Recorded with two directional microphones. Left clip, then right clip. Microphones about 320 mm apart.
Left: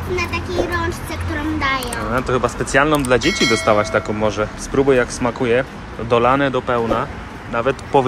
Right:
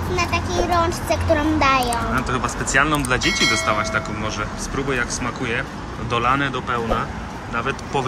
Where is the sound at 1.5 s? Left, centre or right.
Right.